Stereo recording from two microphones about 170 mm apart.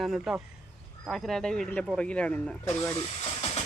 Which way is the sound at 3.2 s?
40° left (ahead or behind).